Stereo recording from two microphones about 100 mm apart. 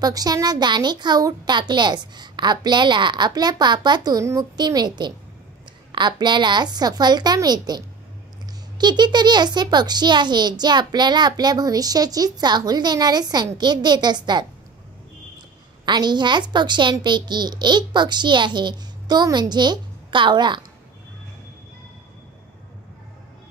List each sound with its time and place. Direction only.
0.0 s a child's voice: 40° right (ahead or behind)
15.8 s a child's voice: 45° right (ahead or behind)